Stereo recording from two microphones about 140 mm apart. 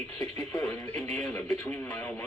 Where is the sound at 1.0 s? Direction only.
Centre (ahead or behind).